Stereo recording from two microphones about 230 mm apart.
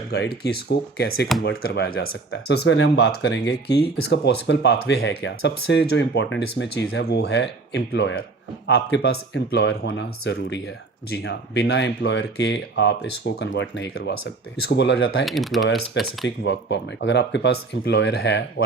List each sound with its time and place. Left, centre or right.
0.1 s speech: left
1.3 s speech: centre
1.6 s speech: left
15.2 s speech: centre
16.2 s speech: left